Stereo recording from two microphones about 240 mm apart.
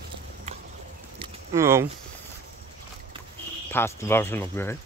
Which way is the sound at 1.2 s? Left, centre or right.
Centre.